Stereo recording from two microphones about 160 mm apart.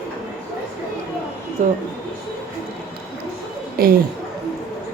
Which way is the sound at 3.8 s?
65° right (ahead or behind).